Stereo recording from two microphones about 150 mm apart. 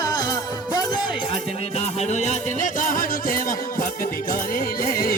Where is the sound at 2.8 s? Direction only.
65° left (ahead or behind).